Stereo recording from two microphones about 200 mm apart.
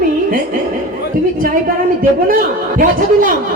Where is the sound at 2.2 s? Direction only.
45° right (ahead or behind).